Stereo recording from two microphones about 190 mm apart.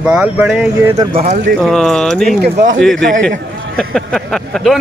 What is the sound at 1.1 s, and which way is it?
Speech, 35° right (ahead or behind).